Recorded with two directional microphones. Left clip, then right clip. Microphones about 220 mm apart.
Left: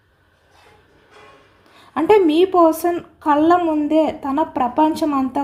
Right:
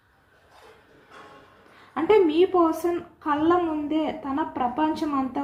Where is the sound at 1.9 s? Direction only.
50° left (ahead or behind).